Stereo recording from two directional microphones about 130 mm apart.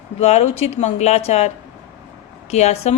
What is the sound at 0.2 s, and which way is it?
A woman's voice, 55° left (ahead or behind).